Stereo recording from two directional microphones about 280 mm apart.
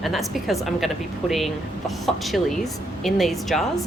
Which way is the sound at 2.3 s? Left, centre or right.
Centre.